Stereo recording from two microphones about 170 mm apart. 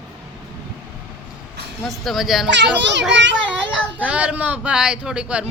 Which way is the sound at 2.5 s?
90° right.